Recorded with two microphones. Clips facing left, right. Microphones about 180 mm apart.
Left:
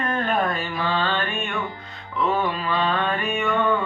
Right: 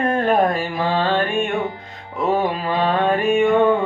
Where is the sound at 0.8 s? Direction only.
45° right (ahead or behind).